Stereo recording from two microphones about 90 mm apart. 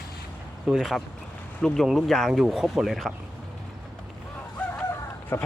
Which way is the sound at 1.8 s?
Centre (ahead or behind).